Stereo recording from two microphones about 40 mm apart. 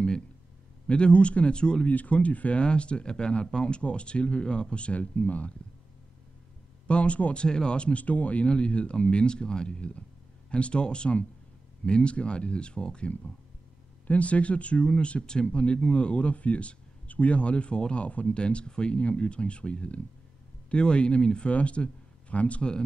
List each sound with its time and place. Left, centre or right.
0.8 s speech: left
1.9 s speech: left
2.6 s speech: left
6.9 s speech: left
7.4 s speech: left
8.0 s speech: left
8.5 s speech: left
14.0 s speech: left
21.5 s speech: left